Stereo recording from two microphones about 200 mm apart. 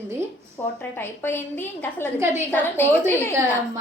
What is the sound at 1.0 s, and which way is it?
A woman's voice, 10° left (ahead or behind).